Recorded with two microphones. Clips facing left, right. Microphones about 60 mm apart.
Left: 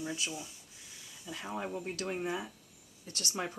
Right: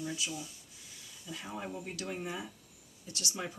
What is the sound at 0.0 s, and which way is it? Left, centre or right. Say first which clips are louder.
Speech: even; left.